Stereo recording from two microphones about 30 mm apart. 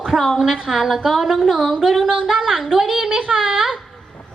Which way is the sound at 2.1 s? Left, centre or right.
Right.